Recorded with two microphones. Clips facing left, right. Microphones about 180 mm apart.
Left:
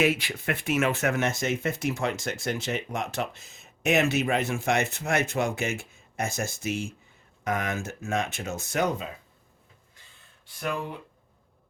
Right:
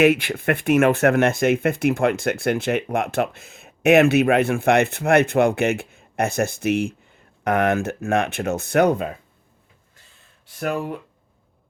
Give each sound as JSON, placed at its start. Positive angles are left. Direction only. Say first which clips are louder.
{"t": 0.0, "sound": "speech", "louder": "right 8 dB", "side_deg": -60}